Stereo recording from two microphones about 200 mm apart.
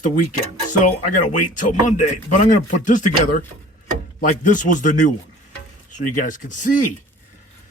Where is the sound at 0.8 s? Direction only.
40° left (ahead or behind).